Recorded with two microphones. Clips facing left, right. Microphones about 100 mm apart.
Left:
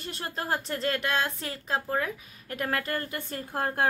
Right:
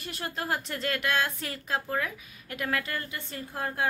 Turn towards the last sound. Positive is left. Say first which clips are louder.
# left 3 dB
turn(degrees=50)  # may be behind; listen again after turning